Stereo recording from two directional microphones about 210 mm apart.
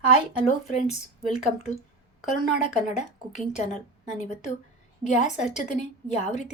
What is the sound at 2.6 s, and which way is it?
Speech, 35° left (ahead or behind).